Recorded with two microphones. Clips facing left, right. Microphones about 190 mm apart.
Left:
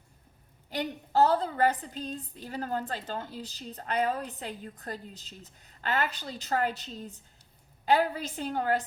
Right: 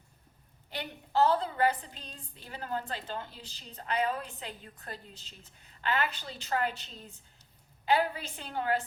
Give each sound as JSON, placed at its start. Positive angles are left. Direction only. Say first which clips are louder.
{"t": 0.7, "sound": "a woman's voice", "louder": "left 4 dB", "side_deg": 40}